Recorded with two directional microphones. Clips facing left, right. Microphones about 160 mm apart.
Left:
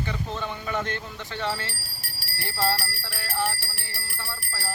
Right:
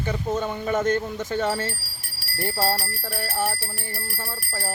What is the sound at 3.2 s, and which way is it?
Speech, 45° right (ahead or behind).